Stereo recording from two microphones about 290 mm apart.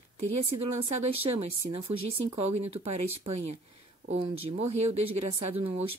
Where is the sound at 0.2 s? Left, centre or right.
Right.